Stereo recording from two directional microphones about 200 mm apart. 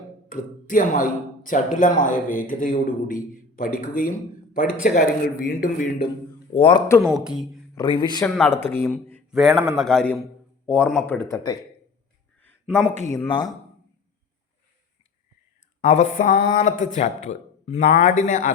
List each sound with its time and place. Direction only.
0.3 s speech: 40° left (ahead or behind)
6.5 s speech: 25° left (ahead or behind)
7.0 s speech: centre (ahead or behind)
7.8 s speech: 25° left (ahead or behind)
8.2 s speech: 10° left (ahead or behind)
12.4 s a sound: 10° left (ahead or behind)
13.1 s speech: 20° left (ahead or behind)
15.9 s speech: 40° left (ahead or behind)